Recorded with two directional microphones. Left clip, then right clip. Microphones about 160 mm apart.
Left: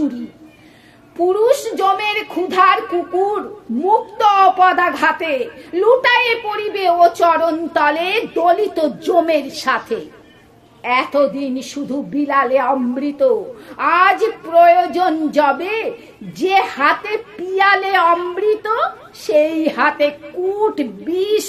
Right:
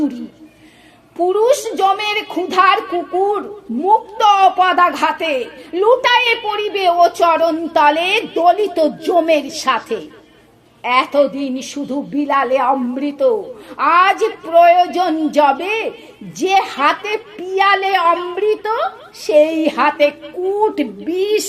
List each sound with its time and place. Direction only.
1.2 s a woman's voice: 35° right (ahead or behind)